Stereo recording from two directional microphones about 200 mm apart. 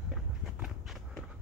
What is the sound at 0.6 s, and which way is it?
Walk, centre (ahead or behind).